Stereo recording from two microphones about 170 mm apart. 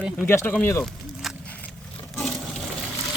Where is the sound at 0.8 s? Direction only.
Centre (ahead or behind).